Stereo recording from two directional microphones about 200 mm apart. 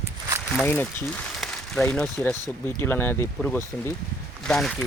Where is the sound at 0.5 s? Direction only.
10° left (ahead or behind).